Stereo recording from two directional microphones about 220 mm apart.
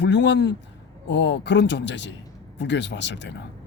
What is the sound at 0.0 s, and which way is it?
A man's voice, 50° left (ahead or behind).